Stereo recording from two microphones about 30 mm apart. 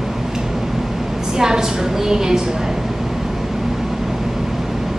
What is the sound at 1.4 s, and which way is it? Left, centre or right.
A woman's voice, centre.